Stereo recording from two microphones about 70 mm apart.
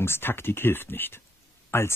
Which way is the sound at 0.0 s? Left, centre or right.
Left.